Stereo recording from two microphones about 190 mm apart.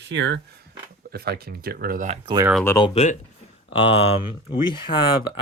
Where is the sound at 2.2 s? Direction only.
20° right (ahead or behind).